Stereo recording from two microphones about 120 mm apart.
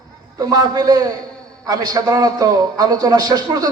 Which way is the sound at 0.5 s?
30° right (ahead or behind).